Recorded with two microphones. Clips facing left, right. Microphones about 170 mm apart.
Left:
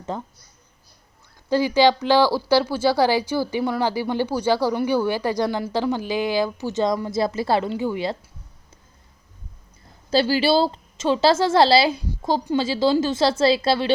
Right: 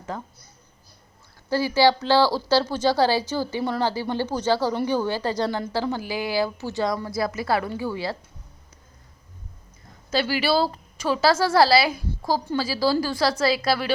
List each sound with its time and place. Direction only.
0.1 s a woman's voice: 20° left (ahead or behind)
1.5 s a woman's voice: 15° left (ahead or behind)
10.1 s a woman's voice: 30° left (ahead or behind)